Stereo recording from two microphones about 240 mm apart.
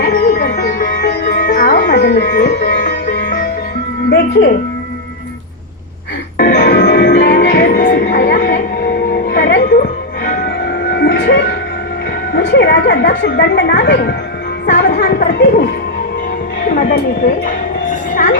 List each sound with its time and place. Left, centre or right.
0.0 s music: left
4.1 s speech: left
6.3 s music: left
12.3 s a woman's voice: left
14.7 s music: left
15.0 s speech: left